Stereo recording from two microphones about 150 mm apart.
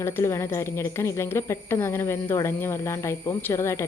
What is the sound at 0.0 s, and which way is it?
A woman's voice, 20° left (ahead or behind).